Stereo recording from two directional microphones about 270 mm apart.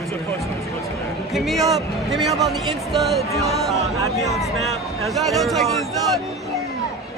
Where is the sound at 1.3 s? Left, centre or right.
Centre.